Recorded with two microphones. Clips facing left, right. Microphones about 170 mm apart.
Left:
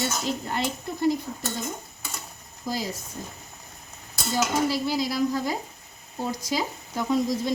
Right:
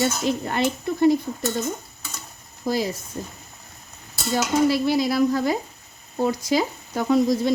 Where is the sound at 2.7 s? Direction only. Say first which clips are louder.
Right 7 dB; 55° right (ahead or behind).